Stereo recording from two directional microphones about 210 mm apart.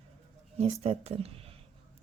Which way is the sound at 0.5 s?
30° right (ahead or behind).